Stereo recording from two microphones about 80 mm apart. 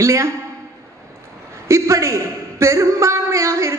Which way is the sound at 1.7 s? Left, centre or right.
Right.